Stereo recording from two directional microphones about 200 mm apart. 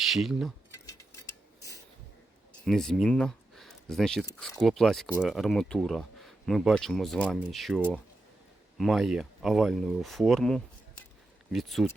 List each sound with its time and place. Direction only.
0.0 s speech: centre (ahead or behind)
0.9 s a sound: 15° left (ahead or behind)
2.6 s speech: centre (ahead or behind)